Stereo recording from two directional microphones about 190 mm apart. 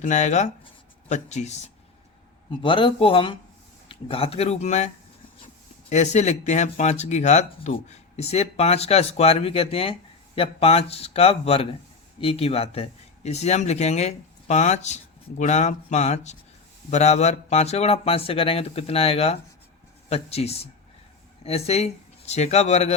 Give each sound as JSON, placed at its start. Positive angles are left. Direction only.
{"t": 0.0, "sound": "speech", "side_deg": 40}
{"t": 2.5, "sound": "speech", "side_deg": 25}
{"t": 5.9, "sound": "speech", "side_deg": 35}